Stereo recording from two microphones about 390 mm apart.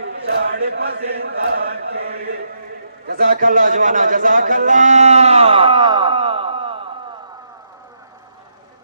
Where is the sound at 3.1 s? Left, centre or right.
Right.